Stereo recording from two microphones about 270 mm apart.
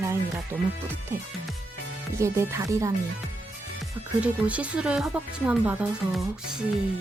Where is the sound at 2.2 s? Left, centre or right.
Centre.